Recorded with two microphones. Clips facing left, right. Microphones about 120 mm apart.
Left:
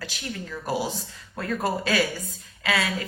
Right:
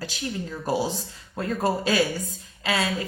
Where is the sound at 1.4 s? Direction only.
25° right (ahead or behind).